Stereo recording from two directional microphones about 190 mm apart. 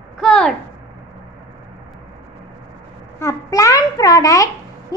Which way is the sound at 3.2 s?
15° left (ahead or behind).